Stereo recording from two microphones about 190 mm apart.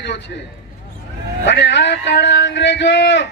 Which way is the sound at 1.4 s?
65° left (ahead or behind).